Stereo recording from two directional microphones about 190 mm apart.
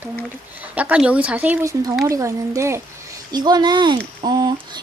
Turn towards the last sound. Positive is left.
turn(degrees=-20)  # may be behind; listen again after turning